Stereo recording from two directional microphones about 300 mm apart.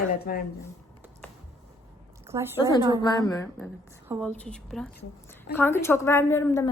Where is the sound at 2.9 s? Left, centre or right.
Centre.